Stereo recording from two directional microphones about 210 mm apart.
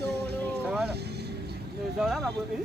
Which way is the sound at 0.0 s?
50° right (ahead or behind).